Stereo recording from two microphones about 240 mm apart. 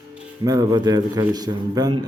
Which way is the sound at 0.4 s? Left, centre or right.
Centre.